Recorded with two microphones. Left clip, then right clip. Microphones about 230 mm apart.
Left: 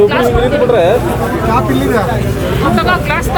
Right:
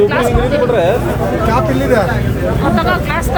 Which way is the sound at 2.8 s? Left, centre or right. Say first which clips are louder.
Left 2 dB; right.